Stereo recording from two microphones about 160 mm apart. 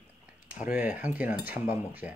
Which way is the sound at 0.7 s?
10° right (ahead or behind).